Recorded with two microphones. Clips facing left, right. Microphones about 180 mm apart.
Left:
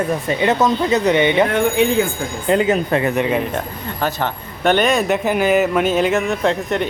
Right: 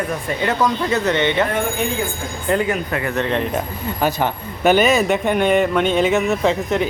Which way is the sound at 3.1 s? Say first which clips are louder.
Left 2 dB; 10° left (ahead or behind).